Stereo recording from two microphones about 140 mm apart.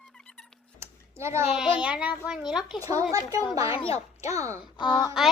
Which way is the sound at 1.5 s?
5° right (ahead or behind).